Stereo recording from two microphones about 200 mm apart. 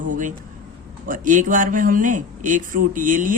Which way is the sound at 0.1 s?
40° right (ahead or behind).